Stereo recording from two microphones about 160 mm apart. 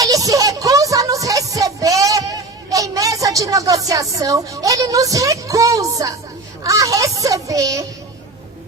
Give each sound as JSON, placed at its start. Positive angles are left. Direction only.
{"t": 0.0, "sound": "music", "side_deg": -20}
{"t": 3.8, "sound": "a child's voice", "side_deg": -20}